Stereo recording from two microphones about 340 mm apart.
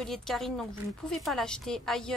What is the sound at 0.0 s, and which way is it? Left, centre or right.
Speech, centre.